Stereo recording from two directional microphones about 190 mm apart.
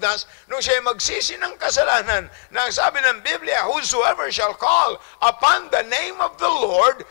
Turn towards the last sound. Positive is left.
turn(degrees=15)  # may be behind; listen again after turning